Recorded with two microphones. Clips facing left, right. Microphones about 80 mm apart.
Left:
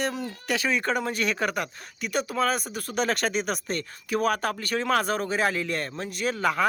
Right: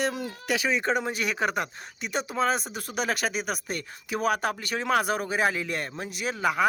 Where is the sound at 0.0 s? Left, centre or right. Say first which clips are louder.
Right 1 dB; centre.